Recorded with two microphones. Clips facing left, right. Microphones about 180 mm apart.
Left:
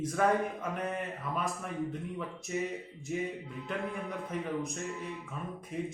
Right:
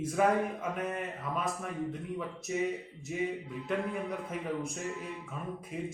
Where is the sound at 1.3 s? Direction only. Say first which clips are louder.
Even; centre (ahead or behind).